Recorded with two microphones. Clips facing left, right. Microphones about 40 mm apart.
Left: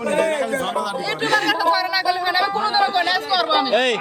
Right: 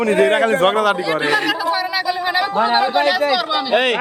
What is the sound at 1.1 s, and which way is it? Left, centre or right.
Speech, centre.